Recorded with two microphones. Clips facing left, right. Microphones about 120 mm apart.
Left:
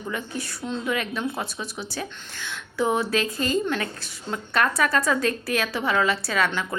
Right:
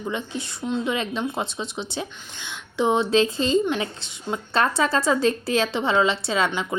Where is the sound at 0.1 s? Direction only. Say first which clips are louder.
Even; 25° right (ahead or behind).